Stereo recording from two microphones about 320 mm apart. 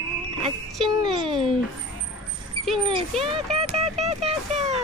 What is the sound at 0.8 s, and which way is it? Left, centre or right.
Music, centre.